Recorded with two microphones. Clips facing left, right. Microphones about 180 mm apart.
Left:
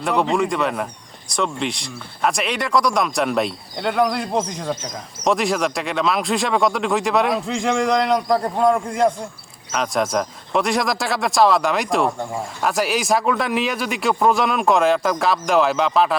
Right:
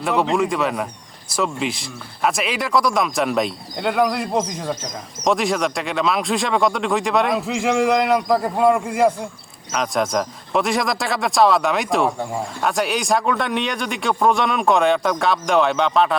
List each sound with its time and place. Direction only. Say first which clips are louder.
0.0 s speech: even; centre (ahead or behind)